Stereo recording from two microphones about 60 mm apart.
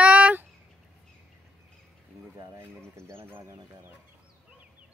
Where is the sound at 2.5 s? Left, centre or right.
Right.